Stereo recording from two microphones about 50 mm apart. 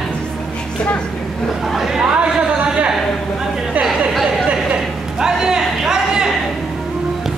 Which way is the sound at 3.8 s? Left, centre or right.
Centre.